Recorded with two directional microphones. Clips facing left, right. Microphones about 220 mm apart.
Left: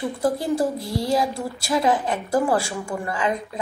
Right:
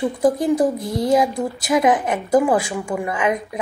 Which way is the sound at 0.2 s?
20° right (ahead or behind).